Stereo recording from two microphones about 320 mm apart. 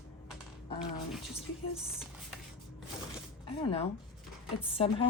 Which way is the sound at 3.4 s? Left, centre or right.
Centre.